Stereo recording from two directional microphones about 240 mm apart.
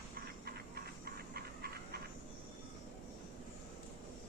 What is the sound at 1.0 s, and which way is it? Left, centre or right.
Dog, right.